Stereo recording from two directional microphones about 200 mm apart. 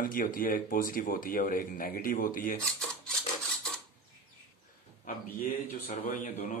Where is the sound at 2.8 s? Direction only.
5° left (ahead or behind).